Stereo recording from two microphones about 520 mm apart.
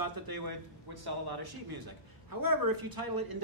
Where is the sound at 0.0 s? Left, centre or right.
Right.